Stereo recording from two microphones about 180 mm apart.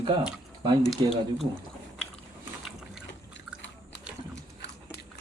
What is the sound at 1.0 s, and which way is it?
Speech, 25° right (ahead or behind).